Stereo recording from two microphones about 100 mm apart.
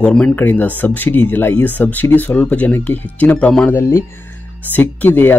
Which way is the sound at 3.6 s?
25° left (ahead or behind).